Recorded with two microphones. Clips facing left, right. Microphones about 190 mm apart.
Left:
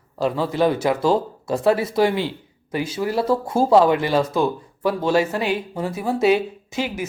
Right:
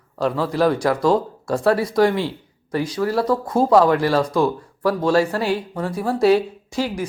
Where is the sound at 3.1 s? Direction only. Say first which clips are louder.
Left 2 dB; 25° left (ahead or behind).